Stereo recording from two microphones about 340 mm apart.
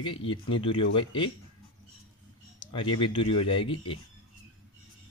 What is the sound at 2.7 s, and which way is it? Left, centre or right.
Speech, centre.